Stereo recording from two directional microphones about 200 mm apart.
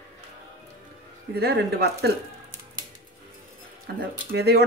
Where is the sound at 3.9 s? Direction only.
55° right (ahead or behind).